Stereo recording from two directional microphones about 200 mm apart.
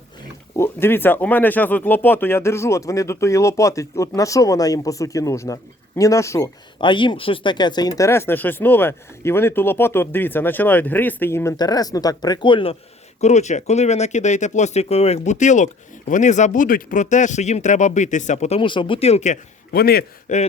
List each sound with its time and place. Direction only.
0.5 s speech: 10° left (ahead or behind)
6.7 s speech: 25° left (ahead or behind)
13.2 s speech: 35° left (ahead or behind)
19.7 s a man's voice: 50° left (ahead or behind)